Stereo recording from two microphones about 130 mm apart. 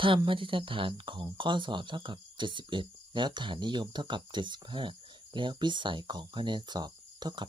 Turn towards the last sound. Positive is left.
turn(degrees=-35)  # may be behind; listen again after turning